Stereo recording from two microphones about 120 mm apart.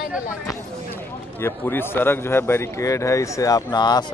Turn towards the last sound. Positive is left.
turn(degrees=35)  # may be behind; listen again after turning